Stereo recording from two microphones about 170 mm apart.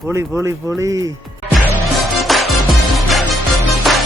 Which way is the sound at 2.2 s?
Centre (ahead or behind).